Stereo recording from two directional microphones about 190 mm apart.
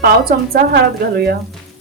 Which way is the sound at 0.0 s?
50° right (ahead or behind).